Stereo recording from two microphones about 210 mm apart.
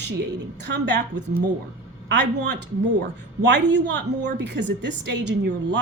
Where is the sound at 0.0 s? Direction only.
55° right (ahead or behind).